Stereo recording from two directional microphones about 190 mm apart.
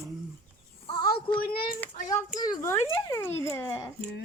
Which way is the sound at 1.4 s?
50° left (ahead or behind).